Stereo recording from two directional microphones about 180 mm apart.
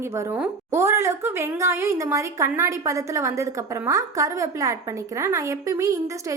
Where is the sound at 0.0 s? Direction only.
15° right (ahead or behind).